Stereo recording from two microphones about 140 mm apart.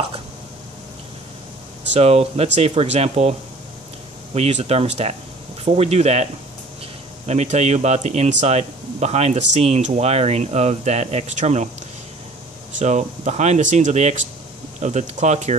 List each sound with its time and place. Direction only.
2.0 s speech: 50° right (ahead or behind)
7.2 s speech: 50° right (ahead or behind)
12.7 s speech: 60° right (ahead or behind)